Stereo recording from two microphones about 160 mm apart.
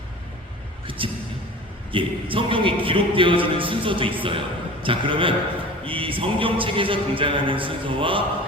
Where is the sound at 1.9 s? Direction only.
35° right (ahead or behind).